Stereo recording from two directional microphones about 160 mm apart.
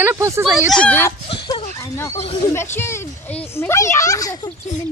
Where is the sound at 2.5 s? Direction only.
15° left (ahead or behind).